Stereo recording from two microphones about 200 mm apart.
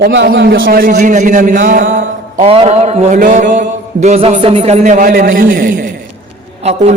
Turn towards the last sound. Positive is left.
turn(degrees=-35)  # may be behind; listen again after turning